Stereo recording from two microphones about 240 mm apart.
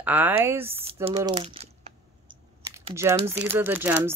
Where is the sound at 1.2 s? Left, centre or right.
Centre.